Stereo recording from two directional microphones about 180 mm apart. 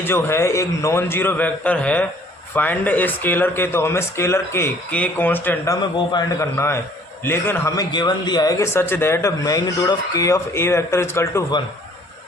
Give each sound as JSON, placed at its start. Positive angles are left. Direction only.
{"t": 0.0, "sound": "a man's voice", "side_deg": 10}